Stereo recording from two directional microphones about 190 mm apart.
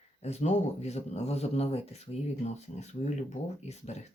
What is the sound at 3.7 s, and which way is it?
Speech, 35° left (ahead or behind).